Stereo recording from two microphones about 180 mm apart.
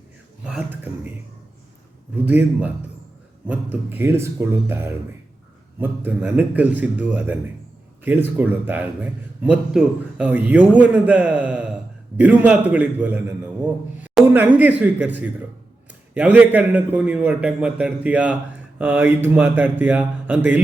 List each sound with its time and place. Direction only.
0.4 s a man's voice: 10° right (ahead or behind)
2.1 s a man's voice: 10° right (ahead or behind)